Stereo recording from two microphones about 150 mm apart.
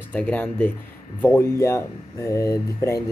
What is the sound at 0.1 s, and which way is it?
Speech, 10° left (ahead or behind).